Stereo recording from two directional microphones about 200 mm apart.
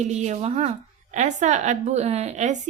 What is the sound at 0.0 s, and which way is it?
Speech, 35° right (ahead or behind).